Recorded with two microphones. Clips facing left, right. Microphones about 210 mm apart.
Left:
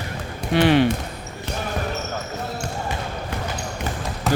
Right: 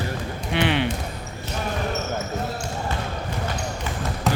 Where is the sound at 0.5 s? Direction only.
40° left (ahead or behind).